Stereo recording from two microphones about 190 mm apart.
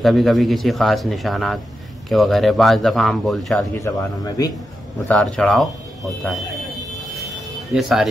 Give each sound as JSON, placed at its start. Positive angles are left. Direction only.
{"t": 0.0, "sound": "speech", "side_deg": 0}
{"t": 3.7, "sound": "speech", "side_deg": 15}
{"t": 5.0, "sound": "speech", "side_deg": 5}
{"t": 7.7, "sound": "speech", "side_deg": 0}